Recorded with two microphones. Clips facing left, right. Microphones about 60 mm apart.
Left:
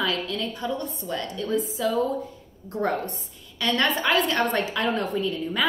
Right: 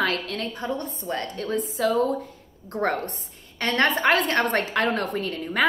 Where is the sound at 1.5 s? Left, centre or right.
Right.